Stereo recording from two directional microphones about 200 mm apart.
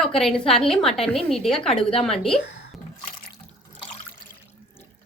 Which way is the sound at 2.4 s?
55° left (ahead or behind).